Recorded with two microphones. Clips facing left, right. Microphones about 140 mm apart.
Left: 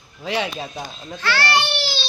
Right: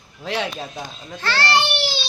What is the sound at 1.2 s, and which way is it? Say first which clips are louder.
Speech: even; 30° right (ahead or behind).